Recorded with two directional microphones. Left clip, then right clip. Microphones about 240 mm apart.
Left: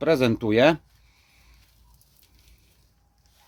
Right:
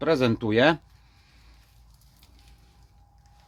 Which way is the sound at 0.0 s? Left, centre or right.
Centre.